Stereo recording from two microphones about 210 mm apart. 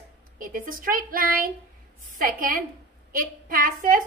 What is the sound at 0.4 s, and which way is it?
A woman's voice, 40° right (ahead or behind).